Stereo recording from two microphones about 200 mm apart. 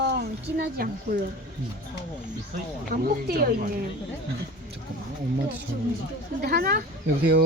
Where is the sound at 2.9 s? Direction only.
50° right (ahead or behind).